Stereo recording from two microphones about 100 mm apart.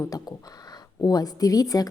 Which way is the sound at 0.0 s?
35° left (ahead or behind).